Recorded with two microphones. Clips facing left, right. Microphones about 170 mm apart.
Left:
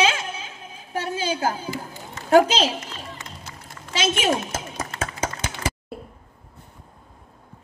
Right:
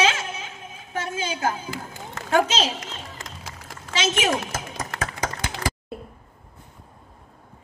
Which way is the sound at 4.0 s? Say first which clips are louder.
Left 1 dB; 30° left (ahead or behind).